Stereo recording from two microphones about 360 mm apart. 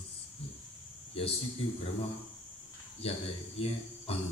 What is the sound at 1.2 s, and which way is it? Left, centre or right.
Speech, centre.